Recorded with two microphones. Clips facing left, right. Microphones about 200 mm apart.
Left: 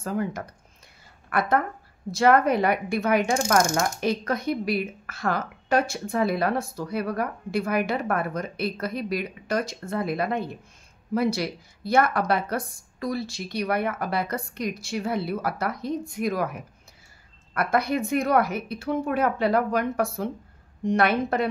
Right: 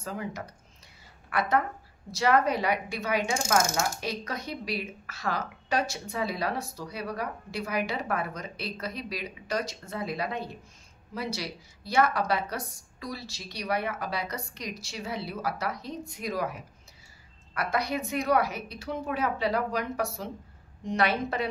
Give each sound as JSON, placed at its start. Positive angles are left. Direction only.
{"t": 0.0, "sound": "speech", "side_deg": 50}
{"t": 2.0, "sound": "speech", "side_deg": 55}